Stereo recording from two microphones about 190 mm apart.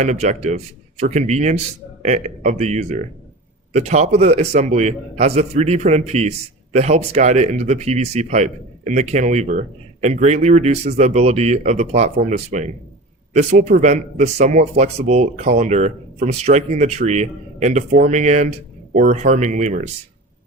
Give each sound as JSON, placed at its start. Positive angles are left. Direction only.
{"t": 0.0, "sound": "speech", "side_deg": -35}